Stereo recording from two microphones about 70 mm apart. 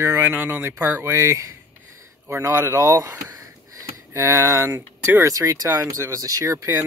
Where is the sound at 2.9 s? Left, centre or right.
Right.